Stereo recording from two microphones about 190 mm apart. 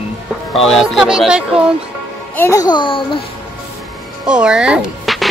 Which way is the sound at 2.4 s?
15° left (ahead or behind).